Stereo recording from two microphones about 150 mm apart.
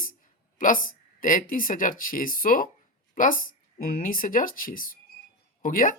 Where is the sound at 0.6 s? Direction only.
65° left (ahead or behind).